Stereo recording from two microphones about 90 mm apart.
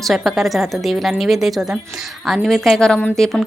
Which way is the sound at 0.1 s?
Centre (ahead or behind).